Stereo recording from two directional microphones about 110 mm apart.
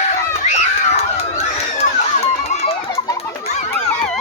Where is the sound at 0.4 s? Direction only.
85° left.